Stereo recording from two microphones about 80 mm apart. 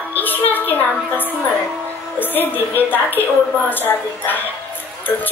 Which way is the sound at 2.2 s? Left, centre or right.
Left.